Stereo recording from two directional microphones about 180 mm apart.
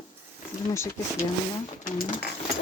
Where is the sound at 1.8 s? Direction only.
45° left (ahead or behind).